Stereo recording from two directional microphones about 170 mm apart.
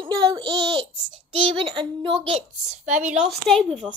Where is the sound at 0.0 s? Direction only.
25° right (ahead or behind).